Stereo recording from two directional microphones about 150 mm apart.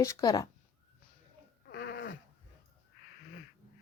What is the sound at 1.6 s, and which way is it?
Goat, 90° left.